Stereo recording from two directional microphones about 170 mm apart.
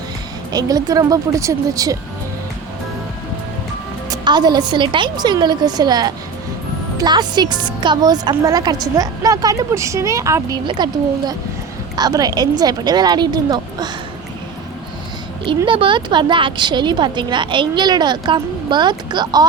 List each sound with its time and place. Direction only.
0.5 s a woman's voice: 20° right (ahead or behind)
4.1 s a woman's voice: 25° right (ahead or behind)
11.9 s a woman's voice: 25° right (ahead or behind)
15.4 s a woman's voice: 30° right (ahead or behind)